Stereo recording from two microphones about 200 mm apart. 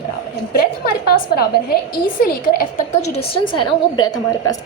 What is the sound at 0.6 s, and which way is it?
A woman's voice, 45° left (ahead or behind).